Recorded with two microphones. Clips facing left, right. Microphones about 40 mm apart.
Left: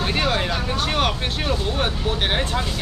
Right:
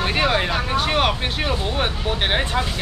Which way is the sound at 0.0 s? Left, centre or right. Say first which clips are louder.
Right 2 dB; centre.